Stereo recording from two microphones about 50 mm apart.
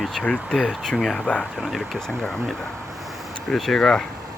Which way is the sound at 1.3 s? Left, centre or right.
Left.